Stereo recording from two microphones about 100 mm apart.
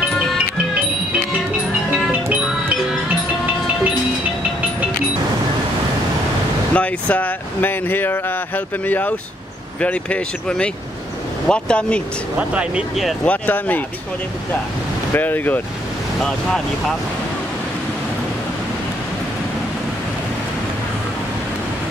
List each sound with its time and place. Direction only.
4.4 s train: 15° right (ahead or behind)
6.7 s speech: 15° left (ahead or behind)
12.4 s speech: 10° right (ahead or behind)
13.2 s speech: 15° left (ahead or behind)
15.1 s speech: 20° left (ahead or behind)
16.2 s speech: 5° left (ahead or behind)